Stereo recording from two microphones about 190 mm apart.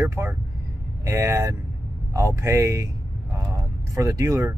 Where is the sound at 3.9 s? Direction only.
20° right (ahead or behind).